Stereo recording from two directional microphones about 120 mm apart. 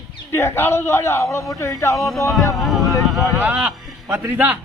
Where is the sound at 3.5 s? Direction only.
15° right (ahead or behind).